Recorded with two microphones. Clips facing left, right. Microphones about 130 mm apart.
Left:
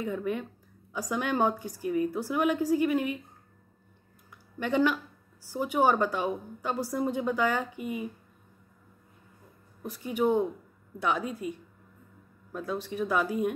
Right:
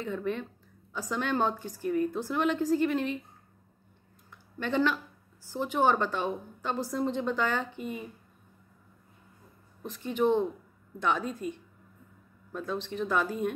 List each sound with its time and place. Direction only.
0.0 s a woman's voice: 10° left (ahead or behind)
4.6 s a woman's voice: 10° left (ahead or behind)
9.8 s a woman's voice: 10° left (ahead or behind)